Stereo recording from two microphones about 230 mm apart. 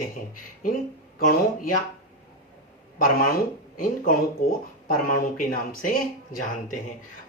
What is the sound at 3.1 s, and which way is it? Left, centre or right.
Speech, left.